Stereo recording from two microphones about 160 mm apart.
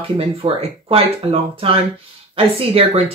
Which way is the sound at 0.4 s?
35° right (ahead or behind).